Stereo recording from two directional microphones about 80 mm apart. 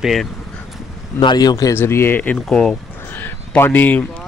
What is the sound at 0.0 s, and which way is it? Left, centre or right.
Speech, centre.